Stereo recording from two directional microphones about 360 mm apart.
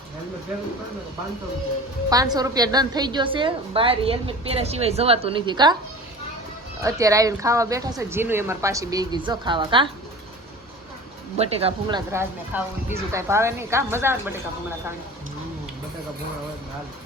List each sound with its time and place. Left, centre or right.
2.0 s a woman's voice: centre
6.8 s a woman's voice: centre
11.3 s a woman's voice: centre